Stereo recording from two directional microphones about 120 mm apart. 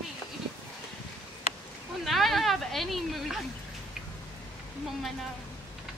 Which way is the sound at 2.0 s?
Centre (ahead or behind).